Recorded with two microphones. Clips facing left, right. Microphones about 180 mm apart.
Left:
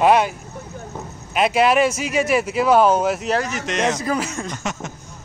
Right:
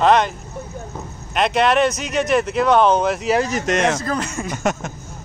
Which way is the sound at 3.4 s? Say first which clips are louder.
Right 4 dB; 40° right (ahead or behind).